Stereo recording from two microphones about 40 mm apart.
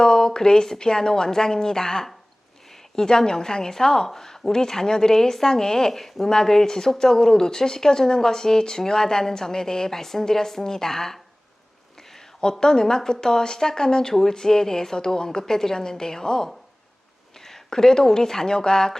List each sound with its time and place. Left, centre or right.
0.0 s a woman's voice: centre
12.4 s a woman's voice: centre